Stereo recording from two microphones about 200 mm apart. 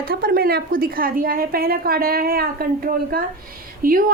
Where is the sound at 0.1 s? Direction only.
50° right (ahead or behind).